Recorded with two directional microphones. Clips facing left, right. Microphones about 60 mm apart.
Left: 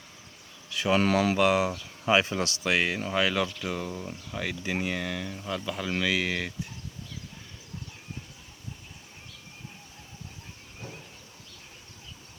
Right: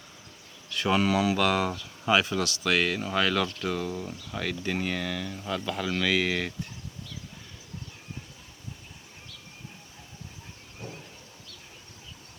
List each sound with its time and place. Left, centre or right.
0.7 s a sound: centre
0.9 s speech: left
1.4 s speech: centre
1.8 s speech: left; by 6.7 s centre